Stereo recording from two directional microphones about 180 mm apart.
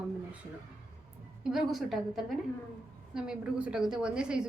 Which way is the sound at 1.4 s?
Centre (ahead or behind).